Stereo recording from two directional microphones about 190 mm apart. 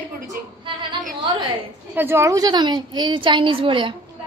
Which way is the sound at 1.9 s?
10° right (ahead or behind).